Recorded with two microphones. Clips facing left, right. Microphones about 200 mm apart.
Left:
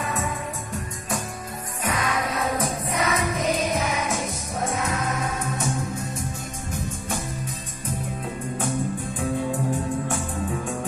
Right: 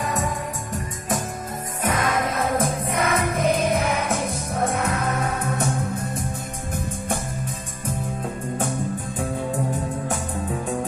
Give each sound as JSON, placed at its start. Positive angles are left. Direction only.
{"t": 0.0, "sound": "music", "side_deg": -40}
{"t": 1.8, "sound": "music", "side_deg": -45}